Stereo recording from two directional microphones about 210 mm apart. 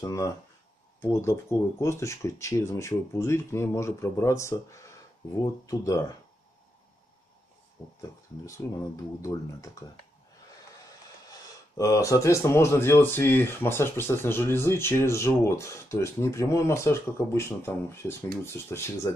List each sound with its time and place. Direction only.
0.0 s speech: 20° left (ahead or behind)
8.0 s speech: 15° left (ahead or behind)
11.2 s speech: 15° left (ahead or behind)